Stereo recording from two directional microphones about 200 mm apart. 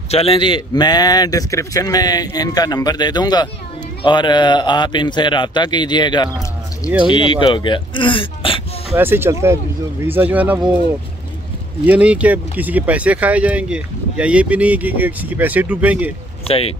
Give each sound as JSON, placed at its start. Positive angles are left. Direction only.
{"t": 0.1, "sound": "a man's voice", "side_deg": 30}
{"t": 8.9, "sound": "speech", "side_deg": -10}
{"t": 11.8, "sound": "speech", "side_deg": -5}
{"t": 16.4, "sound": "speech", "side_deg": 30}